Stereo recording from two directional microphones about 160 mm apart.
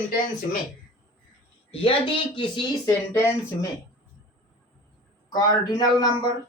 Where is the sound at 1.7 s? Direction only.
30° left (ahead or behind).